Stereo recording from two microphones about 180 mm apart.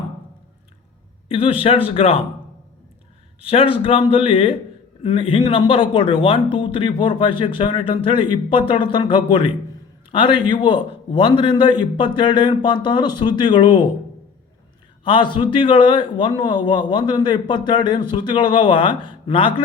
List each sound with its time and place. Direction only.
1.3 s speech: 30° left (ahead or behind)
3.4 s speech: 30° left (ahead or behind)
15.0 s speech: 30° left (ahead or behind)